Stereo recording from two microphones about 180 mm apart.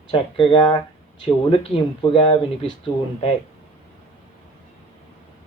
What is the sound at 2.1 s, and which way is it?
Speech, 30° left (ahead or behind).